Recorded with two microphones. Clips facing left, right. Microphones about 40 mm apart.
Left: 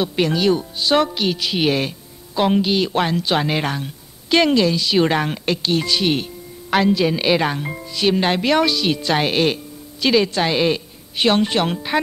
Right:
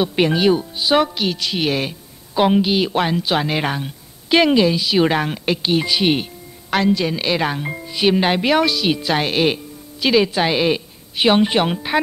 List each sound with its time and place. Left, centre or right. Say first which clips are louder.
0.0 s speech: right 2 dB; centre
6.7 s speech: left 1 dB; centre